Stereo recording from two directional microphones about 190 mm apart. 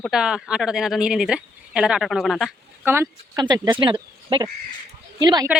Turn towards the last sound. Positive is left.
turn(degrees=-20)  # may be behind; listen again after turning